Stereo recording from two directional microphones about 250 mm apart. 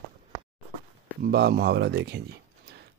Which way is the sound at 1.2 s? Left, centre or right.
Right.